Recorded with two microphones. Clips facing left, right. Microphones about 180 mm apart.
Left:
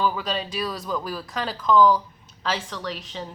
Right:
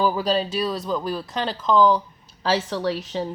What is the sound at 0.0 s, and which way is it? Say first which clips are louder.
Speech: right 4 dB; 35° right (ahead or behind).